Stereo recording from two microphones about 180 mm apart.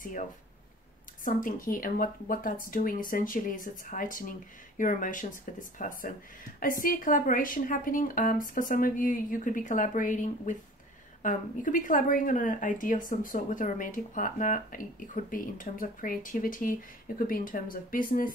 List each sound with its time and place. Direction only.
1.2 s a woman's voice: 50° left (ahead or behind)